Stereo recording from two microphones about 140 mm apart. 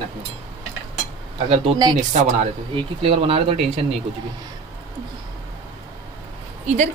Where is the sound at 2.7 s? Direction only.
40° right (ahead or behind).